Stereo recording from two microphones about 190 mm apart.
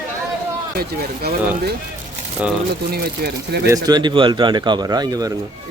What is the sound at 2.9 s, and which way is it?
Speech, 55° right (ahead or behind).